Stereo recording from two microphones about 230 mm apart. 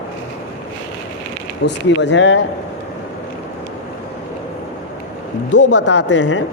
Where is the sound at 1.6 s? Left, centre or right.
Left.